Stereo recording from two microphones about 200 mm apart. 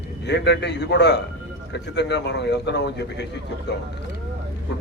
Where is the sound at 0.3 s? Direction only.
60° left (ahead or behind).